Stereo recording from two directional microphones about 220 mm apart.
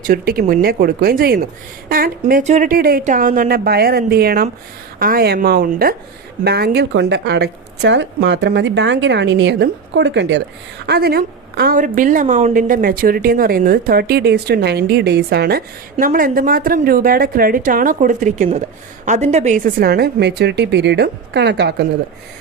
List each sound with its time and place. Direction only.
0.1 s a woman's voice: 40° right (ahead or behind)